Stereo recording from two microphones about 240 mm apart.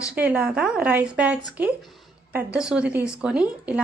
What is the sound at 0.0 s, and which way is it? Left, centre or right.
Speech, centre.